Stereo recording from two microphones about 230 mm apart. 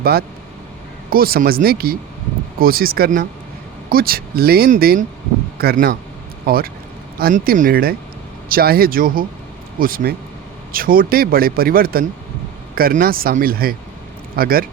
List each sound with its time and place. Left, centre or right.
0.0 s speech: right